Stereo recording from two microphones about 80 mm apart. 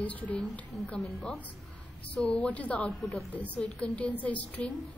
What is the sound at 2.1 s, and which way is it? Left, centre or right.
A woman's voice, centre.